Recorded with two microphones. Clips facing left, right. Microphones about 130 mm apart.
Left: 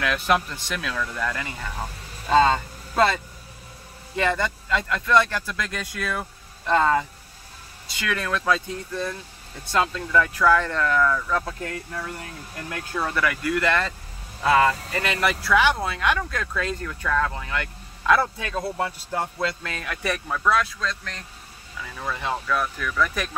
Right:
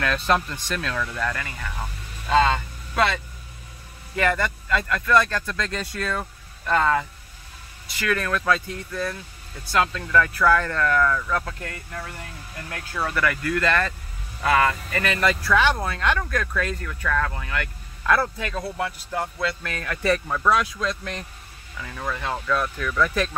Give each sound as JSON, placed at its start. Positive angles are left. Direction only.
{"t": 0.0, "sound": "a man's voice", "side_deg": 10}
{"t": 0.9, "sound": "speech", "side_deg": 0}
{"t": 1.2, "sound": "speech", "side_deg": 15}
{"t": 2.4, "sound": "vehicle", "side_deg": 35}
{"t": 4.1, "sound": "a man's voice", "side_deg": 20}
{"t": 13.0, "sound": "a man's voice", "side_deg": 15}
{"t": 15.1, "sound": "a man's voice", "side_deg": 15}
{"t": 20.2, "sound": "speech", "side_deg": -10}
{"t": 21.8, "sound": "speech", "side_deg": 5}